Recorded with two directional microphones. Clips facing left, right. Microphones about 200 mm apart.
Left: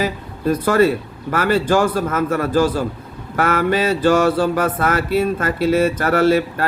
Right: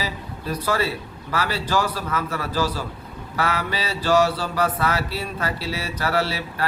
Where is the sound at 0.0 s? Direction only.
50° left (ahead or behind).